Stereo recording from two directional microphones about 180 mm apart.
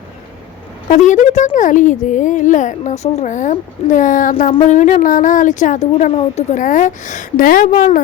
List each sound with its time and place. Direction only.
0.9 s speech: 45° left (ahead or behind)